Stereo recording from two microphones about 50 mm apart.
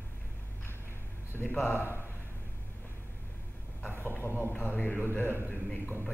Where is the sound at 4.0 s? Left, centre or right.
Left.